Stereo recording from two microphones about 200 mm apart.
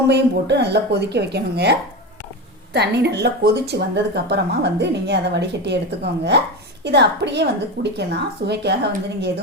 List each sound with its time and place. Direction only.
0.1 s speech: 55° right (ahead or behind)
2.7 s speech: 55° right (ahead or behind)